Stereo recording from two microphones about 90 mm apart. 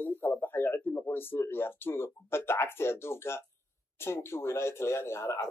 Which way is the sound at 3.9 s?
30° left (ahead or behind).